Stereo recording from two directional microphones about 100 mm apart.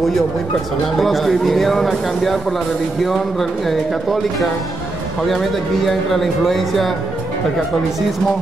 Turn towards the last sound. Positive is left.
turn(degrees=0)  # may be behind; listen again after turning